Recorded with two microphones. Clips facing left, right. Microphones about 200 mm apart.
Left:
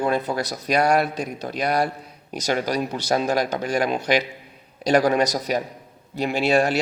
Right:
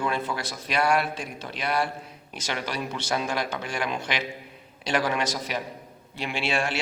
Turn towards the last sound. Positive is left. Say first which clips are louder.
# left 8 dB
turn(degrees=40)  # may be behind; listen again after turning